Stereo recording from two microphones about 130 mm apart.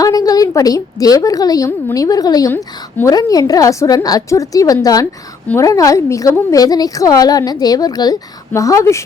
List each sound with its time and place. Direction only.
0.0 s a woman's voice: 30° left (ahead or behind)